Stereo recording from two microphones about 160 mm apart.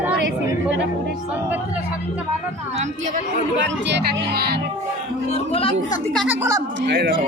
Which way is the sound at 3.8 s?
90° right.